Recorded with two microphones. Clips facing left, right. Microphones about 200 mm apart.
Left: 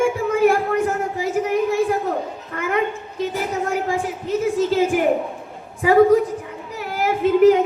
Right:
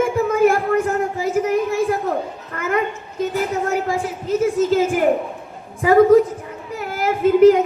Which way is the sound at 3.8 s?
40° right (ahead or behind).